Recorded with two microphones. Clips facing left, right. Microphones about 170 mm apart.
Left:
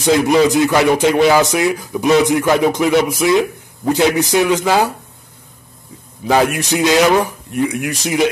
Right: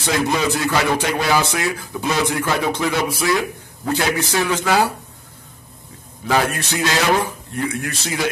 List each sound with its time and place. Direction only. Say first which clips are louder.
0.0 s speech: left 8 dB; 15° left (ahead or behind)
6.2 s speech: left 5 dB; 15° left (ahead or behind)